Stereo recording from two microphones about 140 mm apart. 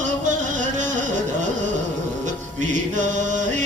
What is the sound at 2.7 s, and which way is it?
Chant, 65° right (ahead or behind).